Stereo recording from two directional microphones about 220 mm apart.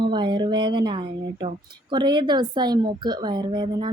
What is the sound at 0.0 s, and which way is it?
Speech, 20° right (ahead or behind).